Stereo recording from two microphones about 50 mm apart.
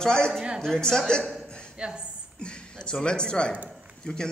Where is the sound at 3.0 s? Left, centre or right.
Centre.